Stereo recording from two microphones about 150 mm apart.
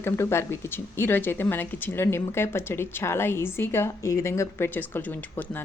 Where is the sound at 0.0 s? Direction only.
15° left (ahead or behind).